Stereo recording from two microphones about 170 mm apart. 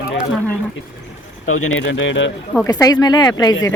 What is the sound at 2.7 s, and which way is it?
Speech, 20° left (ahead or behind).